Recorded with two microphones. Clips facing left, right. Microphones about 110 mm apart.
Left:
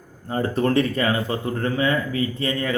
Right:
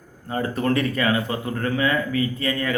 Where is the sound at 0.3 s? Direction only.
30° left (ahead or behind).